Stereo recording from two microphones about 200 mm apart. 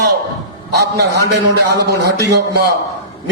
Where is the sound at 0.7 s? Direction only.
55° right (ahead or behind).